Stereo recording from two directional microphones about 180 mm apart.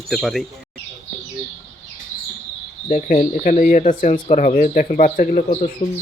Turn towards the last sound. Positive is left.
turn(degrees=40)  # may be behind; listen again after turning